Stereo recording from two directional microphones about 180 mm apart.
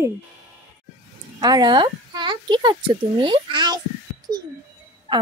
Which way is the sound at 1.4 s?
20° right (ahead or behind).